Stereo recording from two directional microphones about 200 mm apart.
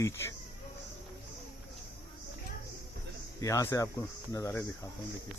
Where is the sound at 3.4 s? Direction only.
15° left (ahead or behind).